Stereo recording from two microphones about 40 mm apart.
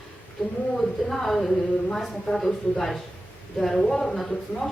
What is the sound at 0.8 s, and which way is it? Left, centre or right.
A woman's voice, centre.